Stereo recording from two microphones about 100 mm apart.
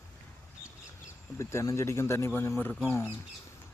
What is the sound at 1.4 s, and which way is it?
Speech, 30° left (ahead or behind).